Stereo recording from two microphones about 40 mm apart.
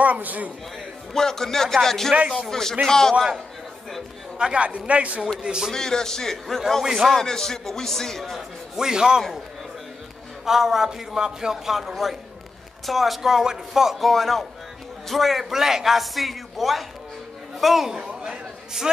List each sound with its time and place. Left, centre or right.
0.0 s a man's voice: right
1.1 s a man's voice: centre
4.4 s a man's voice: right
5.4 s a man's voice: right
5.7 s a man's voice: centre
6.8 s a man's voice: centre
7.2 s a man's voice: centre
8.7 s a man's voice: centre
10.4 s a man's voice: centre
17.9 s a sound: centre